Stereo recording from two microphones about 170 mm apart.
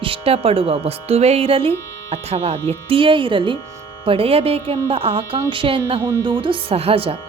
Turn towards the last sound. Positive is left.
turn(degrees=-35)  # may be behind; listen again after turning